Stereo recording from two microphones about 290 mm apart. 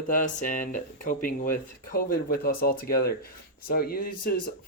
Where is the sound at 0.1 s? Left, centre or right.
Left.